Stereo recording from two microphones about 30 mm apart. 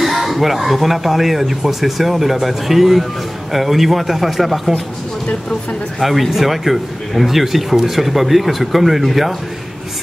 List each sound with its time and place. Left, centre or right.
0.0 s speech: centre
5.9 s speech: centre